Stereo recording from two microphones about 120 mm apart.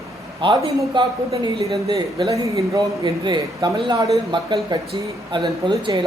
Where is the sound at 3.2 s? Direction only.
40° right (ahead or behind).